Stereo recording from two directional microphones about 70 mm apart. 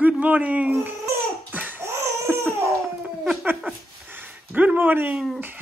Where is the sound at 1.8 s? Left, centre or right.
Right.